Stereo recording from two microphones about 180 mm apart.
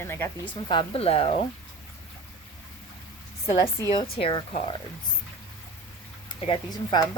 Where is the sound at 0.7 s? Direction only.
30° left (ahead or behind).